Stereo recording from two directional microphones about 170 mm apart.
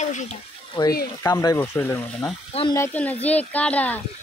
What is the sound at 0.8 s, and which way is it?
Speech, 30° left (ahead or behind).